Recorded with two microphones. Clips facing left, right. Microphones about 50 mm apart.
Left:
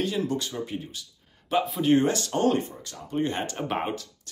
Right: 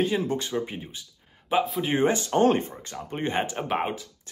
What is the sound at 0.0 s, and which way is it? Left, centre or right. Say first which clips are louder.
Speech: right 2 dB; right.